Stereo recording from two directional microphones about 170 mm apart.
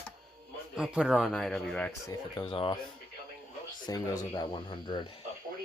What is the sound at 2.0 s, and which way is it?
Speech, 20° left (ahead or behind).